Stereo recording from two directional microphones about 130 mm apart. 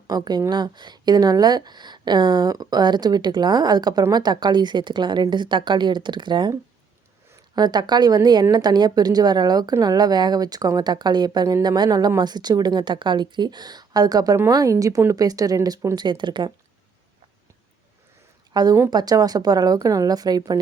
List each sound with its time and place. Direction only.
0.1 s speech: 30° right (ahead or behind)
18.5 s speech: 30° right (ahead or behind)